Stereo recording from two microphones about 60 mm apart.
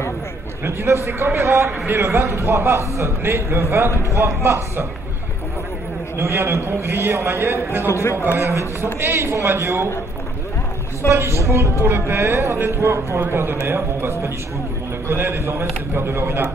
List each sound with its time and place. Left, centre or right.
0.7 s a man's voice: right
6.1 s a man's voice: right
7.9 s a man's voice: left
8.4 s a man's voice: right
11.1 s a man's voice: right
11.8 s a man's voice: right
13.2 s a man's voice: right